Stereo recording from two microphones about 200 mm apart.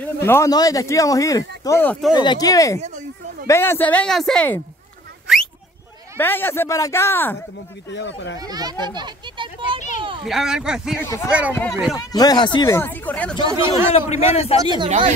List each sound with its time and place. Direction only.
0.0 s speech: 10° left (ahead or behind)
5.3 s a sound: 5° right (ahead or behind)
6.1 s speech: 10° left (ahead or behind)
7.9 s speech: 60° left (ahead or behind)
8.4 s a child's voice: 20° right (ahead or behind)
10.2 s speech: centre (ahead or behind)
11.0 s speech: 10° left (ahead or behind)
11.2 s speech: 5° right (ahead or behind)
11.9 s speech: 20° left (ahead or behind)
13.5 s speech: 15° right (ahead or behind)
13.9 s a man's voice: 30° left (ahead or behind)
14.9 s speech: 35° right (ahead or behind)